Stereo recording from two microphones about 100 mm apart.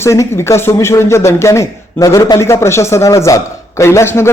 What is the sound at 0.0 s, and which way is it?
A man's voice, 30° left (ahead or behind).